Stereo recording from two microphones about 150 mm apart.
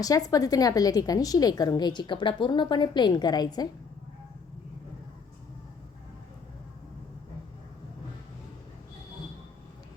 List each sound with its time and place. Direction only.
0.0 s a woman's voice: 25° left (ahead or behind)